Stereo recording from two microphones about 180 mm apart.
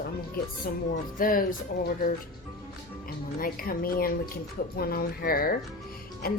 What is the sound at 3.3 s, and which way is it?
A woman's voice, 55° left (ahead or behind).